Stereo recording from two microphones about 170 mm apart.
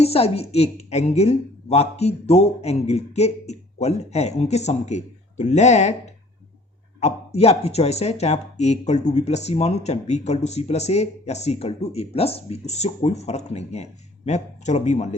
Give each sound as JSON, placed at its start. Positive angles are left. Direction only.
{"t": 0.0, "sound": "speech", "side_deg": 35}
{"t": 7.0, "sound": "speech", "side_deg": 35}